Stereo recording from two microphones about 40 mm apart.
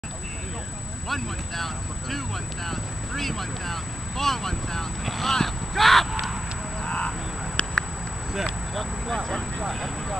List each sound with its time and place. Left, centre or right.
1.0 s speech: centre
6.9 s a sound: left
8.3 s speech: centre
9.0 s speech: centre